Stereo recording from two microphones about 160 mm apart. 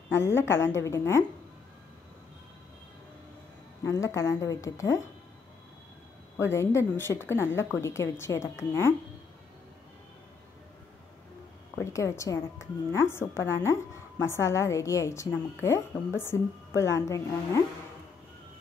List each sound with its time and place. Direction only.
0.1 s a woman's voice: 15° left (ahead or behind)
3.8 s a woman's voice: 20° left (ahead or behind)
6.3 s a woman's voice: 15° left (ahead or behind)
11.7 s a woman's voice: 20° left (ahead or behind)